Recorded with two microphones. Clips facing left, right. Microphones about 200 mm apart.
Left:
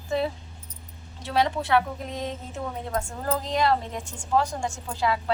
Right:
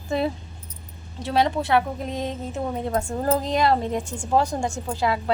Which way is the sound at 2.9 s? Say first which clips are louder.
Right 5 dB; 35° right (ahead or behind).